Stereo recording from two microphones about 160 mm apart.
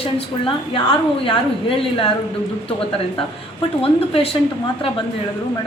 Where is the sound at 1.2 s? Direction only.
35° left (ahead or behind).